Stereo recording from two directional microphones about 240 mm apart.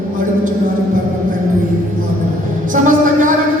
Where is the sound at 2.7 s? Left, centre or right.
Right.